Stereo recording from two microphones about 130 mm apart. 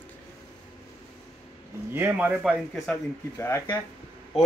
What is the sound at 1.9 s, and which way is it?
Speech, 15° right (ahead or behind).